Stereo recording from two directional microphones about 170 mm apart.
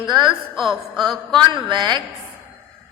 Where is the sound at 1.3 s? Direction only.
25° right (ahead or behind).